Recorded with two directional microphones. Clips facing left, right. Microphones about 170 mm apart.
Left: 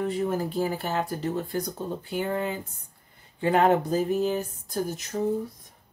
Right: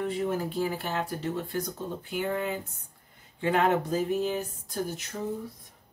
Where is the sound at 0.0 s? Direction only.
40° left (ahead or behind).